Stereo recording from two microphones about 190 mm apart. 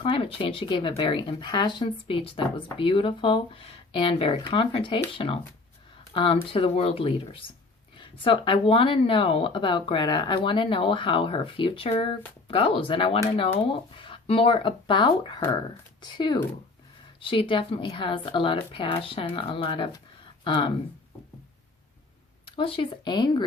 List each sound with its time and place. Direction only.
0.0 s speech: 30° left (ahead or behind)
22.4 s speech: 30° left (ahead or behind)